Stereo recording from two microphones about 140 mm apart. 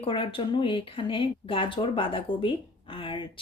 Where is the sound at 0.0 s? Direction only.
40° left (ahead or behind).